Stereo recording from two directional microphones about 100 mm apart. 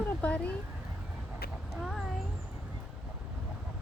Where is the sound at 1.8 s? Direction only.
Centre (ahead or behind).